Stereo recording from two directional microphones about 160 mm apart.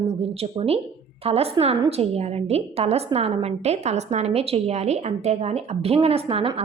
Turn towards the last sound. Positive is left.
turn(degrees=-35)  # may be behind; listen again after turning